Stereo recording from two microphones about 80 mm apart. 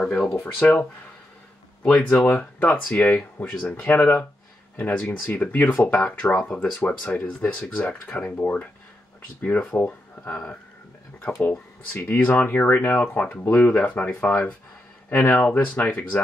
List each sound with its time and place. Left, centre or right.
0.0 s speech: centre
11.5 s speech: centre